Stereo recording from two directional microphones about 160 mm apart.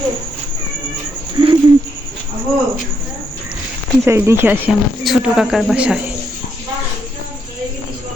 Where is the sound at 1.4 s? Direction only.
30° right (ahead or behind).